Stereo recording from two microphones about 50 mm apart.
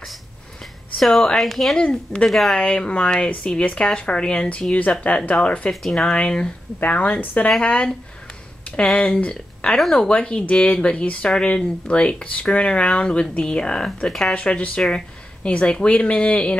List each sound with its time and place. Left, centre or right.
0.9 s speech: centre
1.8 s speech: left
2.2 s speech: centre
2.5 s speech: centre
5.7 s speech: centre
6.8 s a woman's voice: left; by 14.3 s centre
14.3 s speech: left